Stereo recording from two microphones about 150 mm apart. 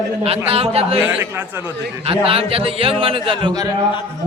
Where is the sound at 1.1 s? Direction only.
10° right (ahead or behind).